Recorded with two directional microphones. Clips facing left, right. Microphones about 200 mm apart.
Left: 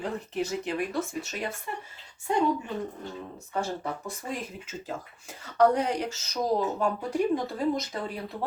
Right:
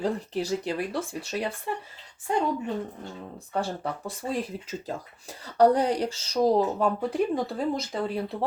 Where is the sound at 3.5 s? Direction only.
35° right (ahead or behind).